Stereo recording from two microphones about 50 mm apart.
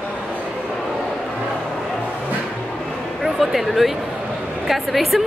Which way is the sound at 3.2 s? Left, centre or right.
Centre.